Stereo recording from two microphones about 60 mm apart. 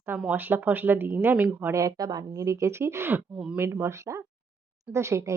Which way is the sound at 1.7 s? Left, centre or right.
Right.